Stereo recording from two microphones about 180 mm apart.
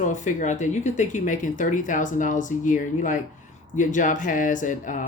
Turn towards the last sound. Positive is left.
turn(degrees=45)  # may be behind; listen again after turning